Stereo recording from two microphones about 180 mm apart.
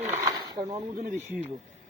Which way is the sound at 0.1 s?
20° right (ahead or behind).